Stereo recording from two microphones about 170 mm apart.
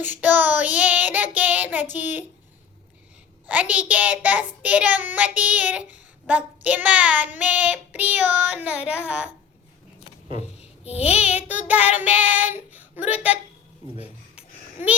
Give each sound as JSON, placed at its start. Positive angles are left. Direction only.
{"t": 0.1, "sound": "child singing", "side_deg": -10}
{"t": 3.4, "sound": "a child's voice", "side_deg": -10}
{"t": 10.6, "sound": "babbling", "side_deg": 40}
{"t": 11.2, "sound": "a child's voice", "side_deg": -10}